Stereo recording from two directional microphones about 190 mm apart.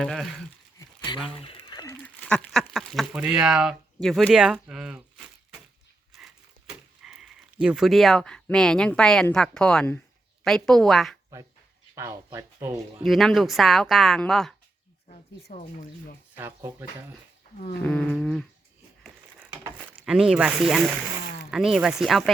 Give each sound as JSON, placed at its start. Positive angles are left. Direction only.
{"t": 0.0, "sound": "speech", "side_deg": 0}
{"t": 0.8, "sound": "a sound", "side_deg": 25}
{"t": 1.9, "sound": "speech", "side_deg": 5}
{"t": 11.9, "sound": "speech", "side_deg": -15}
{"t": 13.1, "sound": "speech", "side_deg": 0}
{"t": 15.5, "sound": "speech", "side_deg": 45}
{"t": 17.8, "sound": "speech", "side_deg": 5}
{"t": 19.4, "sound": "speech", "side_deg": -10}